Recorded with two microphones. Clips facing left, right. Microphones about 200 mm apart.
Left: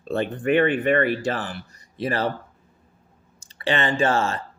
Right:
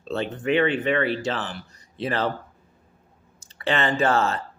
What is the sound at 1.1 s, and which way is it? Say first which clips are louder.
Speech: left 2 dB; 10° left (ahead or behind).